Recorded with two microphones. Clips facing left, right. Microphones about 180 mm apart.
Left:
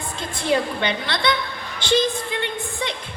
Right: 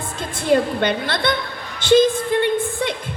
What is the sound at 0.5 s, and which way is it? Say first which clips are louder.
A woman's voice: right 5 dB; 45° right (ahead or behind).